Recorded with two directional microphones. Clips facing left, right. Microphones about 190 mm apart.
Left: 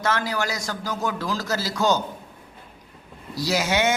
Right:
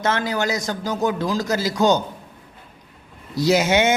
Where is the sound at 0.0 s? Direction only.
20° right (ahead or behind).